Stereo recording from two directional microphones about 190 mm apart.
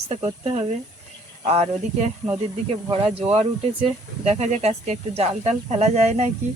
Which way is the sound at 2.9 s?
30° right (ahead or behind).